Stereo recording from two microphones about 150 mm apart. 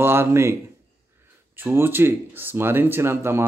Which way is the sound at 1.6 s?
15° right (ahead or behind).